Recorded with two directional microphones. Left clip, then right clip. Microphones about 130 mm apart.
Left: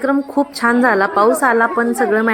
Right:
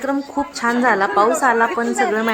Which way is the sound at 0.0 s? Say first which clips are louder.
Left 5 dB; 30° left (ahead or behind).